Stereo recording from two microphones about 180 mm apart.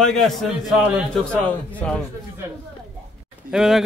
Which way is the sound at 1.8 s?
5° left (ahead or behind).